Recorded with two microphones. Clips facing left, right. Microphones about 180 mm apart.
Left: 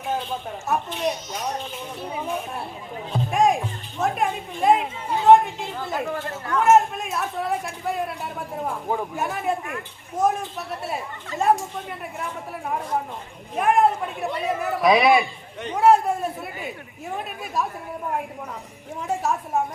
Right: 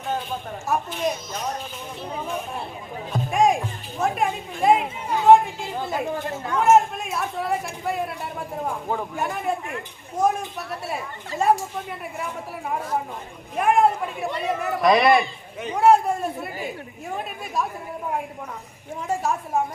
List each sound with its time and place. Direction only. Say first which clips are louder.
0.7 s a man's voice: even; 5° right (ahead or behind)
3.1 s a man's voice: even; centre (ahead or behind); by 6.6 s 15° right (ahead or behind)
6.6 s a man's voice: even; centre (ahead or behind)
13.6 s a man's voice: even; centre (ahead or behind)
19.0 s a man's voice: even; centre (ahead or behind)